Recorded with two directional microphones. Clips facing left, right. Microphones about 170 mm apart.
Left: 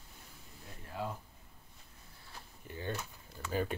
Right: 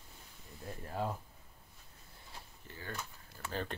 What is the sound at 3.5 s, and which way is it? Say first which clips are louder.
Speech: left 5 dB; 10° left (ahead or behind).